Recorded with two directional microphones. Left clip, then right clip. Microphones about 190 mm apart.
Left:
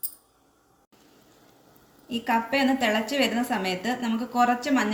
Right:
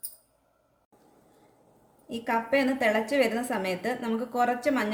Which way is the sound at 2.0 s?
45° right (ahead or behind).